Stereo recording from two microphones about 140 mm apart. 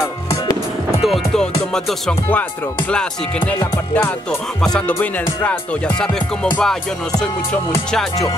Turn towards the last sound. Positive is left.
turn(degrees=10)  # may be behind; listen again after turning